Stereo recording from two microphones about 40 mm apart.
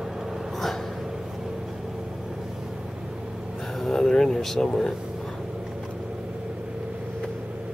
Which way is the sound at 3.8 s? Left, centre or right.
Centre.